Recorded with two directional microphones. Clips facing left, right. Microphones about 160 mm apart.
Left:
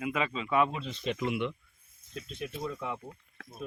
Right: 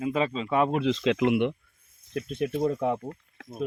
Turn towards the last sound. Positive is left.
turn(degrees=-45)  # may be behind; listen again after turning